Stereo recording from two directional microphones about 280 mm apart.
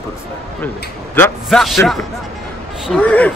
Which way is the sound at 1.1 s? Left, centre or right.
Centre.